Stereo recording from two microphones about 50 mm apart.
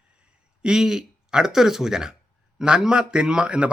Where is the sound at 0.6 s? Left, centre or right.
Centre.